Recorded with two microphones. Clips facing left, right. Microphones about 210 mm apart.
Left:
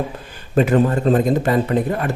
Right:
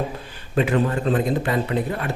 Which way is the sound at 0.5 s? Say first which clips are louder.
Left 5 dB; 45° left (ahead or behind).